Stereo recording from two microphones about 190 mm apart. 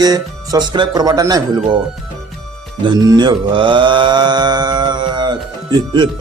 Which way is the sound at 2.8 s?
25° right (ahead or behind).